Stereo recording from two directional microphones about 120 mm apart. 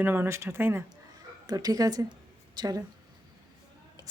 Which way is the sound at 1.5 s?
30° right (ahead or behind).